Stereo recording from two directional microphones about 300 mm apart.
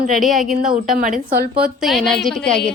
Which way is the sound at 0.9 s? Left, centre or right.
Right.